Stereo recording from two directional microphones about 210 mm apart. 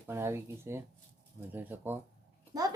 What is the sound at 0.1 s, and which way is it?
A child's voice, 10° right (ahead or behind).